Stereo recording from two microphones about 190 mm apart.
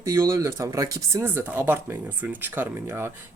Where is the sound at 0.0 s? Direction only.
15° right (ahead or behind).